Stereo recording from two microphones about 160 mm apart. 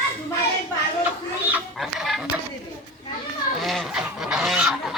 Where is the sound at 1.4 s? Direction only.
5° right (ahead or behind).